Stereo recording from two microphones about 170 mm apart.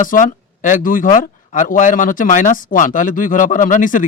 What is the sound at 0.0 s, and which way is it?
Speech, 50° left (ahead or behind).